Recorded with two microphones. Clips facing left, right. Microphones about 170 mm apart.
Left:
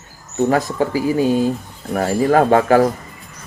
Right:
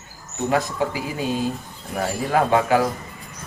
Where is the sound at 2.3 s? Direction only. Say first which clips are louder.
Left 5 dB; 50° left (ahead or behind).